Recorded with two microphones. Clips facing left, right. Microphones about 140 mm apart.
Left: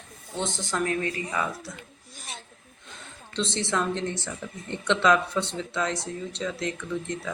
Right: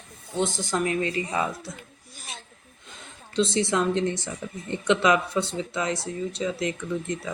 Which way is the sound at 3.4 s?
10° right (ahead or behind).